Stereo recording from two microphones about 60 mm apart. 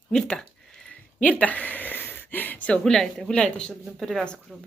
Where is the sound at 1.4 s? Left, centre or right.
Left.